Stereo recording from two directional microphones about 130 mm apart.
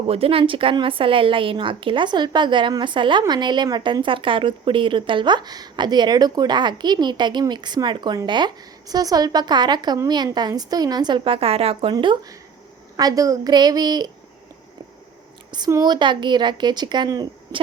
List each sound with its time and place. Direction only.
0.1 s a woman's voice: 45° right (ahead or behind)
13.0 s a woman's voice: 25° right (ahead or behind)
15.7 s a woman's voice: 35° right (ahead or behind)